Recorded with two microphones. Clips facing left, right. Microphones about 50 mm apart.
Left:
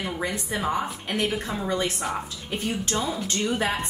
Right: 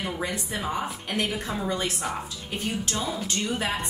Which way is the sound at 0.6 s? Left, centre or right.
Left.